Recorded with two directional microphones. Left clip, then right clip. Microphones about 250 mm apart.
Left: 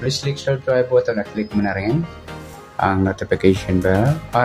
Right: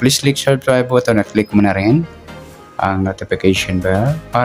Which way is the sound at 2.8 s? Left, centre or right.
Centre.